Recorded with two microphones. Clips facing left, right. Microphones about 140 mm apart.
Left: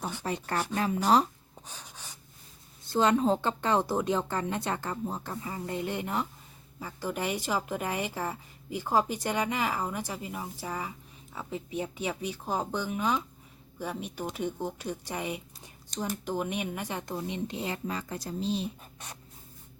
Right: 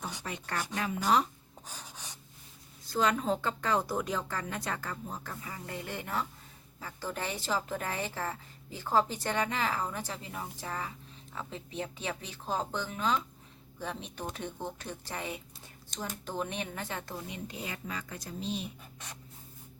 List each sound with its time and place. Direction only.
0.3 s speech: 35° left (ahead or behind)
1.6 s a sound: 10° right (ahead or behind)
2.8 s a woman's voice: 30° left (ahead or behind)